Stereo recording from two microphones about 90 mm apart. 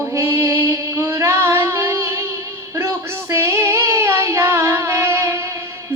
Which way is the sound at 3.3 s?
30° right (ahead or behind).